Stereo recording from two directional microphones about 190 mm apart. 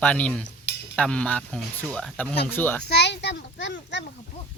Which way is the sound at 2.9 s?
65° left (ahead or behind).